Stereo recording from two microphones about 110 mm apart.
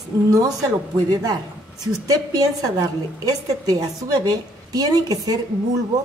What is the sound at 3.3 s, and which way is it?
A woman's voice, 35° right (ahead or behind).